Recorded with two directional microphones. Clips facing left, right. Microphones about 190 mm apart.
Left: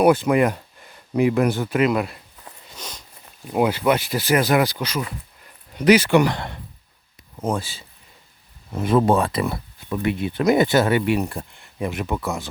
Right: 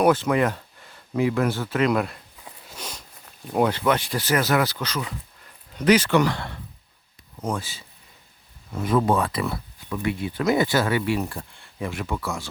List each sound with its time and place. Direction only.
0.0 s speech: 15° left (ahead or behind)
1.9 s a sound: centre (ahead or behind)
3.4 s speech: 5° left (ahead or behind)
7.4 s speech: 30° left (ahead or behind)